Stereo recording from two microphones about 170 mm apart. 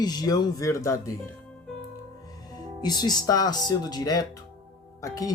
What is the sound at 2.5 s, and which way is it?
Speech, 25° left (ahead or behind).